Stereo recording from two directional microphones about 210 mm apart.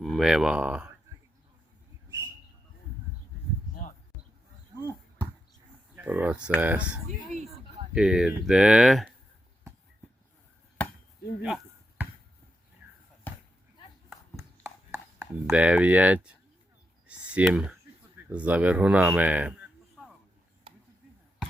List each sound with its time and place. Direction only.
0.0 s speech: centre (ahead or behind)
2.0 s a sound: 15° right (ahead or behind)
6.0 s speech: 5° right (ahead or behind)
10.8 s chop: 5° left (ahead or behind)
14.1 s horse: 15° right (ahead or behind)
15.4 s speech: 5° right (ahead or behind)
17.1 s clicking: 5° right (ahead or behind)
18.3 s speech: 5° right (ahead or behind)
20.0 s a sound: 5° right (ahead or behind)